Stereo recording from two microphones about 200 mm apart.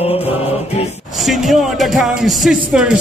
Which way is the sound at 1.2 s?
Centre (ahead or behind).